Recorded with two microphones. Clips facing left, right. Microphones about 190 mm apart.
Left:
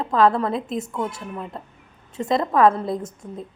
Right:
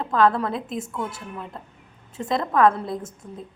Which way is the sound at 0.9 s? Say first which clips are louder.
Left 3 dB; 20° left (ahead or behind).